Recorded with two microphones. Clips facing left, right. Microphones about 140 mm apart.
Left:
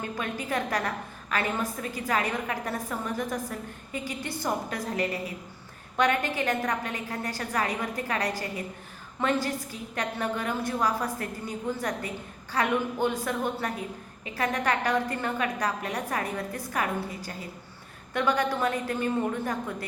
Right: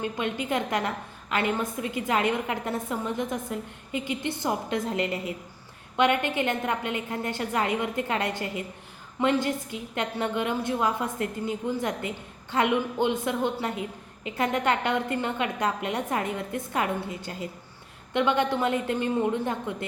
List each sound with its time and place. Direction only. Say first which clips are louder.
0.0 s a woman's voice: right 3 dB; 20° right (ahead or behind)